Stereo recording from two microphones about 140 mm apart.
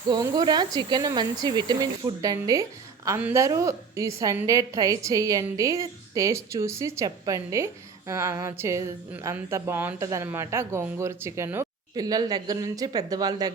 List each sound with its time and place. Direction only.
0.1 s a woman's voice: 30° right (ahead or behind)